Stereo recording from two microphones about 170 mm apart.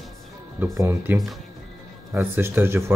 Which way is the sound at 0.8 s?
15° right (ahead or behind).